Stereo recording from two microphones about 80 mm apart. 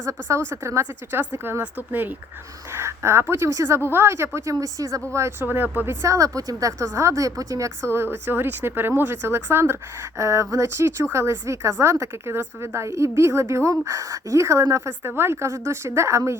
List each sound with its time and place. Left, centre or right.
0.0 s a woman's voice: right
2.7 s a woman's voice: right
4.4 s a woman's voice: right
5.5 s a woman's voice: right
7.9 s a woman's voice: right